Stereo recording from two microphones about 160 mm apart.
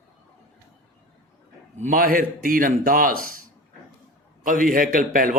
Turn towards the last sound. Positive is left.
turn(degrees=-60)  # may be behind; listen again after turning